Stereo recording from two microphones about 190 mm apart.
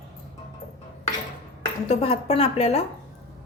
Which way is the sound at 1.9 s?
30° left (ahead or behind).